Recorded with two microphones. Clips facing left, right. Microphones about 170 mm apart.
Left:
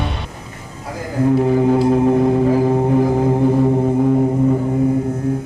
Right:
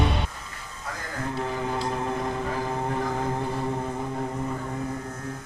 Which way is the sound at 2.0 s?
55° left (ahead or behind).